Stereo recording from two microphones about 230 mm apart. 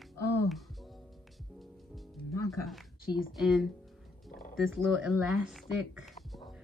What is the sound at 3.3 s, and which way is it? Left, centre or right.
Speech, centre.